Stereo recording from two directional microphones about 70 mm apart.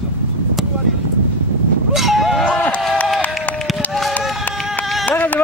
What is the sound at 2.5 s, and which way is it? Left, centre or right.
Run, centre.